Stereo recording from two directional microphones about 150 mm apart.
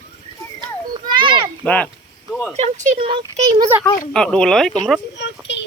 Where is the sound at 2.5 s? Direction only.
50° right (ahead or behind).